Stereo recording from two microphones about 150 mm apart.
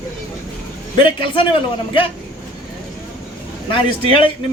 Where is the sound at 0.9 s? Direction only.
35° left (ahead or behind).